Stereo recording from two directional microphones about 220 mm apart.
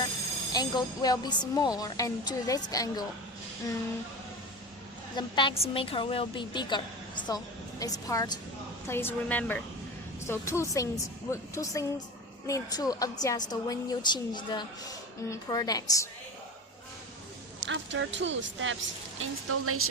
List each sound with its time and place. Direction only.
0.5 s a woman's voice: 15° left (ahead or behind)
5.1 s a woman's voice: 20° left (ahead or behind)
17.7 s speech: 60° right (ahead or behind)
19.2 s speech: 75° right (ahead or behind)